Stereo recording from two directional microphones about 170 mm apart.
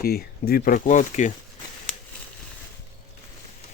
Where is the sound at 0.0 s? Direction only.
65° left (ahead or behind); by 1.3 s 45° left (ahead or behind).